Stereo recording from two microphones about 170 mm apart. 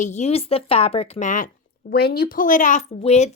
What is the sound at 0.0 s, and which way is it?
A woman's voice, 40° left (ahead or behind).